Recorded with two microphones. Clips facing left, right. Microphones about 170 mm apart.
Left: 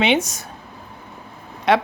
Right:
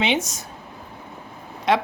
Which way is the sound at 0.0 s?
65° left (ahead or behind).